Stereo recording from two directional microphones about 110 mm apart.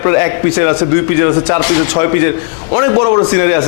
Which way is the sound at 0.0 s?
20° left (ahead or behind).